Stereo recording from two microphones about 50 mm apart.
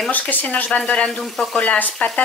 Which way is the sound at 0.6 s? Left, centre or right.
Left.